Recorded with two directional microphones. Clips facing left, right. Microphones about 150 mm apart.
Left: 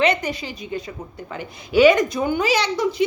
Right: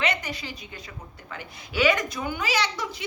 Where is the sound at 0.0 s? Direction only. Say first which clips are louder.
Left 8 dB; 20° left (ahead or behind).